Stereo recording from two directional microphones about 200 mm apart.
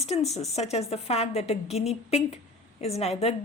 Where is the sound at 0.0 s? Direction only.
35° left (ahead or behind).